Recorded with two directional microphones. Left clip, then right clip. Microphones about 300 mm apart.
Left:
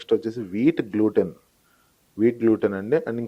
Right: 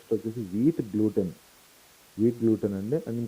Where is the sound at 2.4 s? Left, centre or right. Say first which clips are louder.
Left 6 dB; centre.